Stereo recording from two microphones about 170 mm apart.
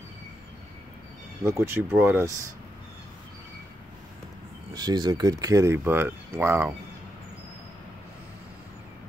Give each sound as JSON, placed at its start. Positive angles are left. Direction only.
{"t": 1.4, "sound": "speech", "side_deg": -15}
{"t": 4.7, "sound": "speech", "side_deg": -25}